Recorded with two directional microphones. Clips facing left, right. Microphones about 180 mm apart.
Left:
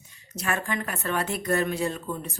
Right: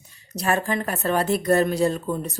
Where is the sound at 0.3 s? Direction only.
35° right (ahead or behind).